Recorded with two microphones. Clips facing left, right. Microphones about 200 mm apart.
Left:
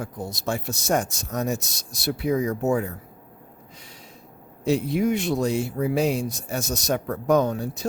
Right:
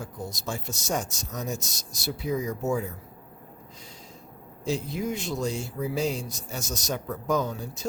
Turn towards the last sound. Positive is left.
turn(degrees=65)  # may be behind; listen again after turning